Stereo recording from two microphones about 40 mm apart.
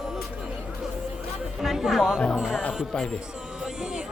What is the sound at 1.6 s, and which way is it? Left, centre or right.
Music, centre.